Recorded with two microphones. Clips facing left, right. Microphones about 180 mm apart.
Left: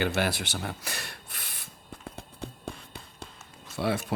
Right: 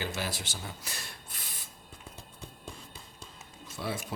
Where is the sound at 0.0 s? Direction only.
65° left (ahead or behind).